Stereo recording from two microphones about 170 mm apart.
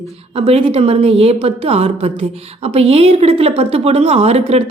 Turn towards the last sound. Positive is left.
turn(degrees=-35)  # may be behind; listen again after turning